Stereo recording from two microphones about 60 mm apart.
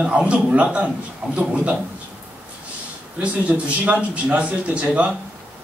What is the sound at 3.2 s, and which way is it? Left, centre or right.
A man's voice, right.